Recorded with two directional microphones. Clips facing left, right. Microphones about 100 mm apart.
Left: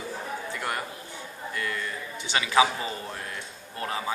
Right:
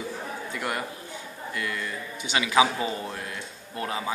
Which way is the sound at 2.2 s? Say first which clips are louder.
Right 1 dB; 15° right (ahead or behind).